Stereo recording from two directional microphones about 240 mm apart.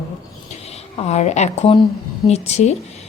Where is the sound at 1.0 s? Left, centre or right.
Left.